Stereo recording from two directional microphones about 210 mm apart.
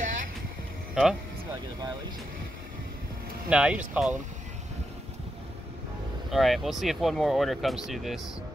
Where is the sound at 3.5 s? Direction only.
5° right (ahead or behind).